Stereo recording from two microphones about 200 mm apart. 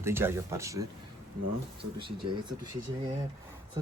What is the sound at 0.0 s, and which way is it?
Speech, 10° right (ahead or behind).